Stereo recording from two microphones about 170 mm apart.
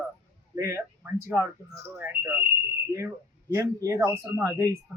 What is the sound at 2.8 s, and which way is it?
Speech, 15° right (ahead or behind).